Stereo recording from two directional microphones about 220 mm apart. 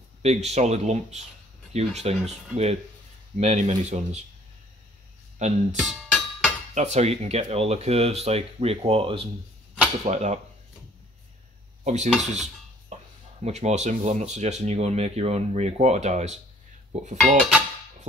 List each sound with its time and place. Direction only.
0.2 s speech: 30° right (ahead or behind)
5.4 s speech: 30° right (ahead or behind)
5.8 s music: centre (ahead or behind)
6.7 s speech: 30° right (ahead or behind)
11.8 s dishes: 30° right (ahead or behind)
12.9 s a sound: 30° right (ahead or behind)
13.4 s speech: 30° right (ahead or behind)
17.4 s speech: 5° right (ahead or behind)